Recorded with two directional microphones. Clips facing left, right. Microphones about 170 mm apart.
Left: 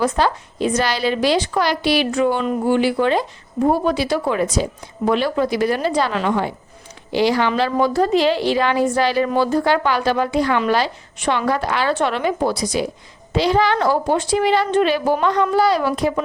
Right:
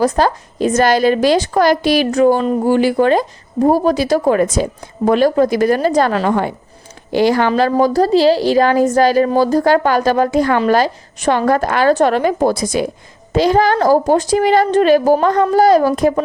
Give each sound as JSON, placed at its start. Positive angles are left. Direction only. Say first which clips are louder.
{"t": 0.0, "sound": "a woman's voice", "louder": "right 4 dB", "side_deg": -40}